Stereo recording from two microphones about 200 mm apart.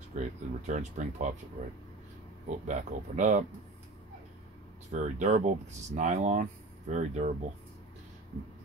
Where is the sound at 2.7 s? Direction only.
40° right (ahead or behind).